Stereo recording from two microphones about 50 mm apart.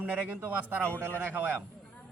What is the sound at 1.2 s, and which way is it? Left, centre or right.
Speech, right.